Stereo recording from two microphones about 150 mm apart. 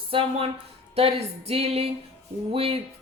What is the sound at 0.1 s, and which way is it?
Speech, 35° right (ahead or behind).